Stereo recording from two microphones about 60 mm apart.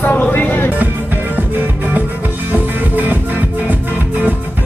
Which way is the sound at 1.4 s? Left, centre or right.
Right.